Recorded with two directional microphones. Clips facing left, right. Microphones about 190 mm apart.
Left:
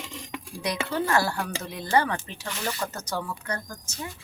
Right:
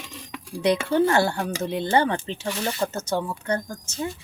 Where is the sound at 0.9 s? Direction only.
25° right (ahead or behind).